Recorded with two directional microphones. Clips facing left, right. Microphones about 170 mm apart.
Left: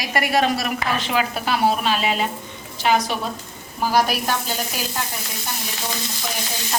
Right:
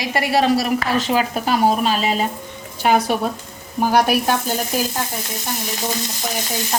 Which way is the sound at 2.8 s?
50° right (ahead or behind).